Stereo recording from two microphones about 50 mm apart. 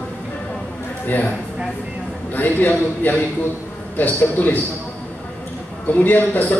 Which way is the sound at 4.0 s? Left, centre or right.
Left.